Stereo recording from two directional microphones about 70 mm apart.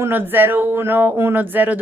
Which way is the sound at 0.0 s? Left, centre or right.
Right.